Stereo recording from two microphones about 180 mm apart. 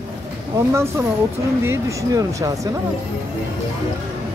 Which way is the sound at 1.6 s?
15° right (ahead or behind).